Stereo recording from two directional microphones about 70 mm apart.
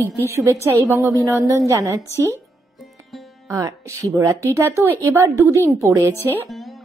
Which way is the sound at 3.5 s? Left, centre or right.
Right.